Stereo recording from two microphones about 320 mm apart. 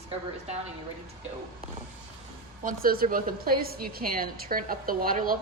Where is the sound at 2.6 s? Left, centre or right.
Right.